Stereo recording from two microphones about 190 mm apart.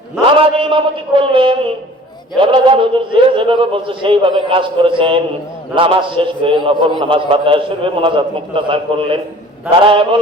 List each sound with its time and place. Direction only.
0.3 s a man's voice: 25° right (ahead or behind)